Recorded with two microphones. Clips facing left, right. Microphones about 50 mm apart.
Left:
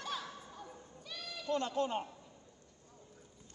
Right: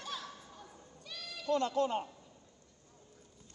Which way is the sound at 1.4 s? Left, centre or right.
Left.